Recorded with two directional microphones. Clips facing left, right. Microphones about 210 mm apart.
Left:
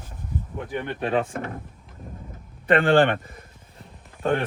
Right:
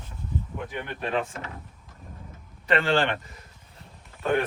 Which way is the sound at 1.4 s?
50° left (ahead or behind).